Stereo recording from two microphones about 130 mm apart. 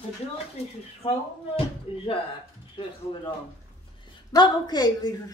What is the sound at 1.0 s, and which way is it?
Speech, 45° left (ahead or behind).